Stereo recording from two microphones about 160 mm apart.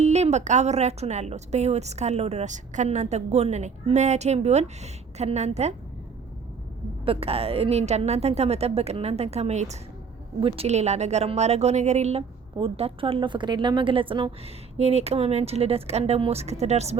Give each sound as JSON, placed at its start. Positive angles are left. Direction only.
{"t": 0.0, "sound": "a woman's voice", "side_deg": -45}
{"t": 7.0, "sound": "a woman's voice", "side_deg": -35}